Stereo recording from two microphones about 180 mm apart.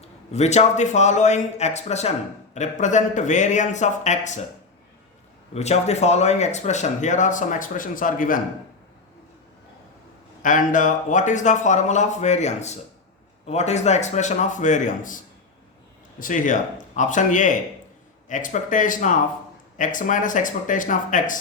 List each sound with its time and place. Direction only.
0.3 s speech: 40° left (ahead or behind)
5.5 s speech: 40° left (ahead or behind)
10.4 s speech: 45° left (ahead or behind)